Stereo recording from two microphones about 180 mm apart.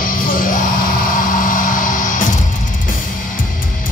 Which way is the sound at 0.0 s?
50° left (ahead or behind).